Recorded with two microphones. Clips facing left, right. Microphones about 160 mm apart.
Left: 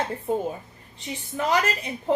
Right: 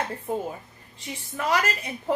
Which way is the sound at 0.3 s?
25° left (ahead or behind).